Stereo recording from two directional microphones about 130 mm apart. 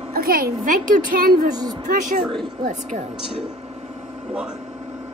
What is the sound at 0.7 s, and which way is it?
Speech, 90° right.